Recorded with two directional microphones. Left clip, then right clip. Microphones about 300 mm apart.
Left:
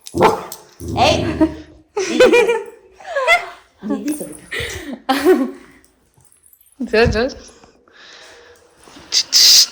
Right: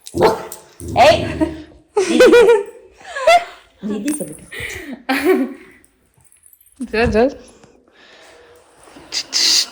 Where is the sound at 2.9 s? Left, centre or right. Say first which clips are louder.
Left 5 dB; left.